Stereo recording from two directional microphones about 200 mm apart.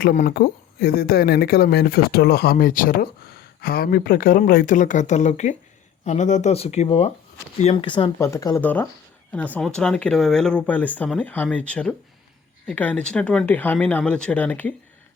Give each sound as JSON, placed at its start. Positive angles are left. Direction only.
{"t": 0.0, "sound": "speech", "side_deg": 45}